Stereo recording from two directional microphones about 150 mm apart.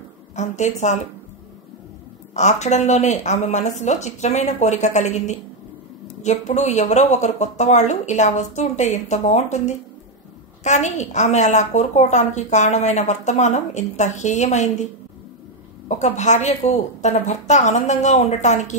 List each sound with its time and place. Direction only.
0.4 s a woman's voice: 50° left (ahead or behind)
2.3 s a woman's voice: 50° left (ahead or behind)
16.0 s a woman's voice: 50° left (ahead or behind)